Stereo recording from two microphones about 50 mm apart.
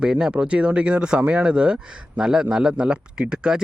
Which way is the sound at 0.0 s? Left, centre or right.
Centre.